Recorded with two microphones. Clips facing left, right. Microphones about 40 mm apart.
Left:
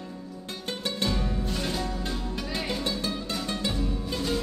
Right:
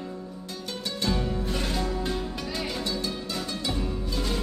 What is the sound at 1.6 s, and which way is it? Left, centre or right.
Music, centre.